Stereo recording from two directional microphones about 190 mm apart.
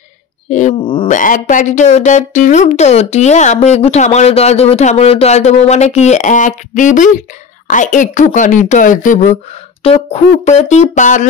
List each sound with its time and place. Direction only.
0.5 s speech: 40° left (ahead or behind)